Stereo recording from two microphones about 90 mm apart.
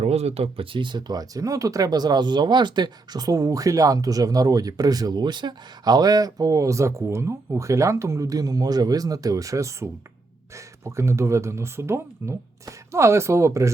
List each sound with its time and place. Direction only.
0.5 s speech: 80° right; by 13.7 s 35° right (ahead or behind)